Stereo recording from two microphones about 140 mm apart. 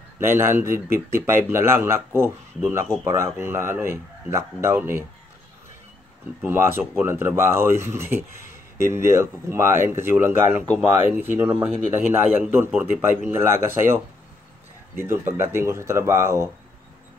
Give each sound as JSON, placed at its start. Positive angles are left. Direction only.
{"t": 0.2, "sound": "speech", "side_deg": -15}
{"t": 6.4, "sound": "speech", "side_deg": -15}
{"t": 15.0, "sound": "speech", "side_deg": -15}